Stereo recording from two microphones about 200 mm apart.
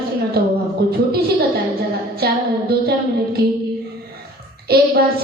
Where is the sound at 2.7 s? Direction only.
50° right (ahead or behind).